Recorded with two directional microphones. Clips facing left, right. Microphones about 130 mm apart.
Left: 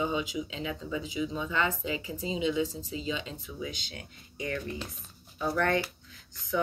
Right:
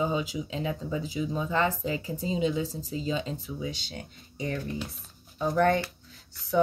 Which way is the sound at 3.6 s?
30° right (ahead or behind).